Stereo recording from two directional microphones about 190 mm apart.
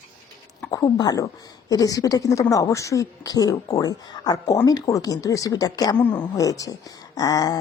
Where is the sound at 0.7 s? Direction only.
20° left (ahead or behind).